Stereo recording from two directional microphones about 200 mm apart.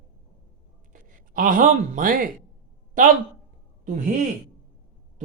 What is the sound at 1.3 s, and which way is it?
Speech, 45° right (ahead or behind).